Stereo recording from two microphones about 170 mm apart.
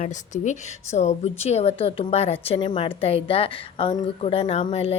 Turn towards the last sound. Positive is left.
turn(degrees=35)  # may be behind; listen again after turning